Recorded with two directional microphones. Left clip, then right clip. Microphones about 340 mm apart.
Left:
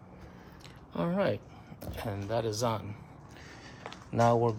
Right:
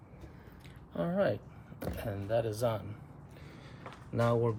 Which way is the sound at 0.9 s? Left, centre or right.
Left.